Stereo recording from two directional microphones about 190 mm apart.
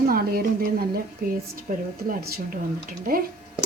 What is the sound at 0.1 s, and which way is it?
Speech, 50° right (ahead or behind).